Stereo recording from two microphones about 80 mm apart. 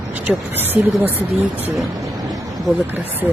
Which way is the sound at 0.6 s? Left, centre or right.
Right.